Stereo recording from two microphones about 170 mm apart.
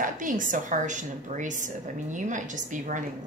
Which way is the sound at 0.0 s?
50° right (ahead or behind).